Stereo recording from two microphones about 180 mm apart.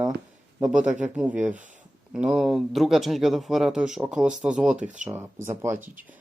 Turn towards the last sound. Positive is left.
turn(degrees=-15)  # may be behind; listen again after turning